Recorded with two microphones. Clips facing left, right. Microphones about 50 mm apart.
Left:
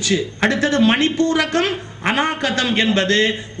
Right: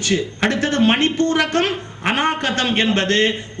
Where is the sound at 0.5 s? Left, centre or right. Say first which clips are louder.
Left 1 dB; right.